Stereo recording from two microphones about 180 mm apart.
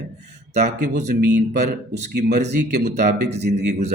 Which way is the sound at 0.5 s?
65° right (ahead or behind).